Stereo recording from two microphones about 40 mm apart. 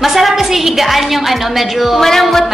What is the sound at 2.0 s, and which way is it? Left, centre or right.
Speech, centre.